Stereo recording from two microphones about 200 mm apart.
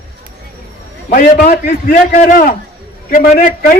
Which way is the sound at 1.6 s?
45° left (ahead or behind).